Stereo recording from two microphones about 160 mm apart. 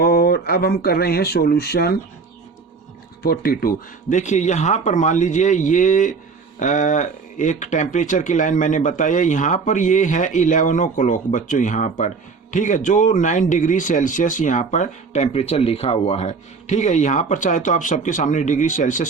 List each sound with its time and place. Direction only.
0.0 s speech: 70° left (ahead or behind)
3.2 s speech: 70° left (ahead or behind)
4.2 s speech: 45° left (ahead or behind)